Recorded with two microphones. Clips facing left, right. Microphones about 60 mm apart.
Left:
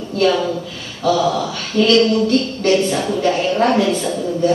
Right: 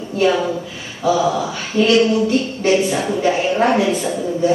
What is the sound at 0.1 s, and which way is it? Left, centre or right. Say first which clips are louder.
A woman's voice: even; centre.